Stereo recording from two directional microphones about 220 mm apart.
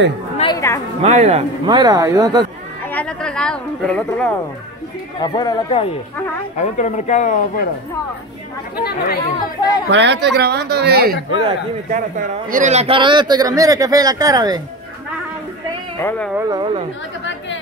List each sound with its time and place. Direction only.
0.4 s chatter: 15° left (ahead or behind)
1.0 s speech: 30° right (ahead or behind)
2.9 s speech: 5° left (ahead or behind)
5.2 s speech: 20° left (ahead or behind)
6.6 s speech: 35° left (ahead or behind)
8.8 s speech: 45° left (ahead or behind)
9.8 s a woman's voice: 50° right (ahead or behind)
11.3 s speech: 25° right (ahead or behind)
12.2 s speech: 35° right (ahead or behind); by 14.6 s 15° right (ahead or behind)
16.0 s speech: 10° left (ahead or behind)
16.3 s speech: 20° right (ahead or behind)